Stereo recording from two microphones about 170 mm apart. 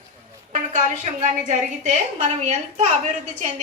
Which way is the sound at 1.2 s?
50° right (ahead or behind).